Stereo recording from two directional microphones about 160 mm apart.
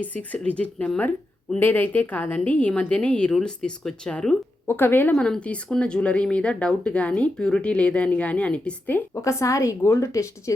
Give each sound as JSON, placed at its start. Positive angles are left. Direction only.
{"t": 0.0, "sound": "speech", "side_deg": 10}